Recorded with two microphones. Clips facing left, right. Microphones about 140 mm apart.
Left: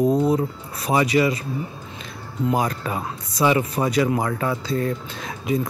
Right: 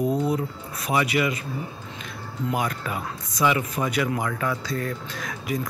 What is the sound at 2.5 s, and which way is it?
Speech, 35° left (ahead or behind).